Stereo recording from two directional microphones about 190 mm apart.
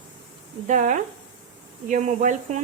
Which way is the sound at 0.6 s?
40° right (ahead or behind).